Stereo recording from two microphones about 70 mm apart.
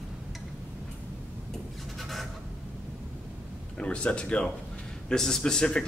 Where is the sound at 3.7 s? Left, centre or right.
Centre.